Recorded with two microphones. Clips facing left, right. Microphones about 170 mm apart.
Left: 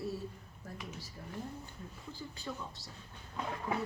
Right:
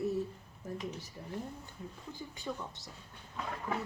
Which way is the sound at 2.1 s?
15° right (ahead or behind).